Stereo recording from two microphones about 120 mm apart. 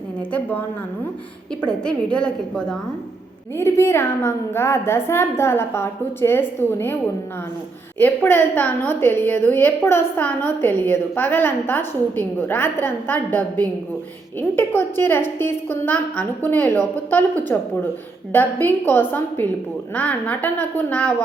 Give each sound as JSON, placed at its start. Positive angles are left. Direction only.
{"t": 0.2, "sound": "a woman's voice", "side_deg": 10}
{"t": 1.6, "sound": "a woman's voice", "side_deg": 10}
{"t": 3.6, "sound": "a woman's voice", "side_deg": 20}